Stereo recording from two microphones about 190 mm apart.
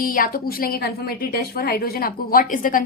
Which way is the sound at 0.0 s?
50° left (ahead or behind).